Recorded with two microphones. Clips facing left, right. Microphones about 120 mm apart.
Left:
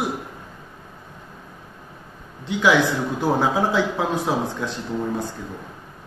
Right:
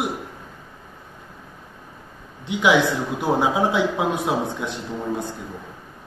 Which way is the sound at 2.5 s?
20° right (ahead or behind).